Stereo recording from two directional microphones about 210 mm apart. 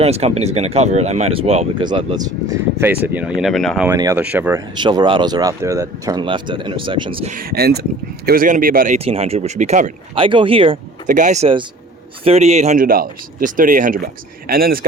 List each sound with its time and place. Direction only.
0.0 s speech: 30° right (ahead or behind); by 3.8 s centre (ahead or behind)
3.8 s speech: 15° right (ahead or behind)
4.7 s speech: 20° right (ahead or behind)
7.3 s speech: 45° right (ahead or behind)
9.0 s speech: 30° right (ahead or behind)
11.0 s speech: 35° right (ahead or behind)